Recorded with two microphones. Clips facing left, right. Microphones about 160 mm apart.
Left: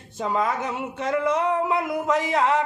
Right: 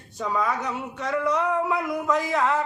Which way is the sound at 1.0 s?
25° left (ahead or behind).